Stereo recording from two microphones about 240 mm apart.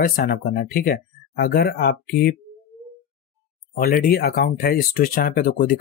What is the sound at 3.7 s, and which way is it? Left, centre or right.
Speech, left.